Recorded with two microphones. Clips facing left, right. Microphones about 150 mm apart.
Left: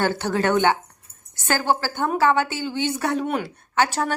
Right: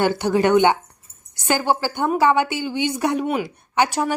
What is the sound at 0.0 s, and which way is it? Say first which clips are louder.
Speech: right 4 dB; 15° right (ahead or behind).